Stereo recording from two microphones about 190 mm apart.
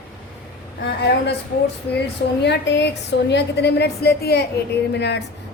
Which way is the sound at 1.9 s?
60° left (ahead or behind).